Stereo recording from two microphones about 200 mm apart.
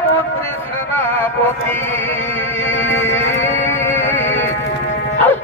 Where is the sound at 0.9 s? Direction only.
10° left (ahead or behind).